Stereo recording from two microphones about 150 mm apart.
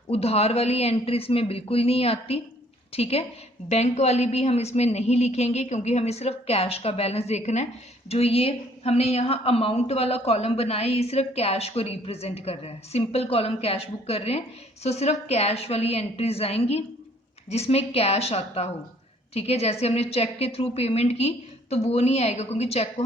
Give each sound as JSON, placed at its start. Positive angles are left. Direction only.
{"t": 0.1, "sound": "a woman's voice", "side_deg": 40}